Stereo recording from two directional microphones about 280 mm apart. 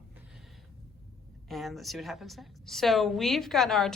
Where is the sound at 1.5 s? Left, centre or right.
Centre.